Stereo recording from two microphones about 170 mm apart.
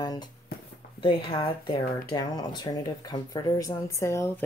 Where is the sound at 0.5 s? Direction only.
65° left (ahead or behind).